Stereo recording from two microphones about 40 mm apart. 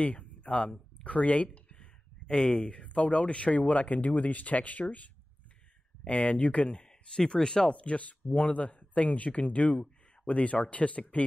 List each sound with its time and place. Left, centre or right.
0.0 s speech: left
1.0 s a sound: left
2.3 s speech: left